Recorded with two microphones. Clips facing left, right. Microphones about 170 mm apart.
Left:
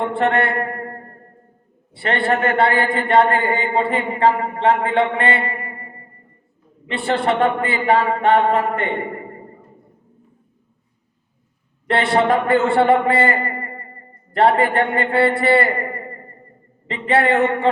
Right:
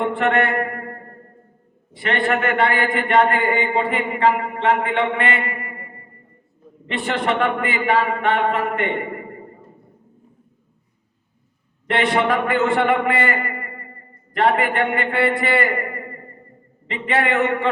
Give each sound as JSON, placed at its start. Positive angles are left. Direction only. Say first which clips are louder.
{"t": 0.2, "sound": "a man's voice", "louder": "left 2 dB", "side_deg": 30}
{"t": 2.0, "sound": "a man's voice", "louder": "left 2 dB", "side_deg": 30}
{"t": 11.9, "sound": "a man's voice", "louder": "left 2 dB", "side_deg": 30}
{"t": 16.9, "sound": "a man's voice", "louder": "left 4 dB", "side_deg": 30}